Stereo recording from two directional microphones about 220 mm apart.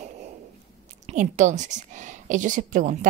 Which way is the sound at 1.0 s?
35° right (ahead or behind).